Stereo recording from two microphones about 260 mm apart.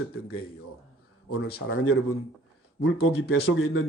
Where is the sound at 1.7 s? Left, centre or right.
Left.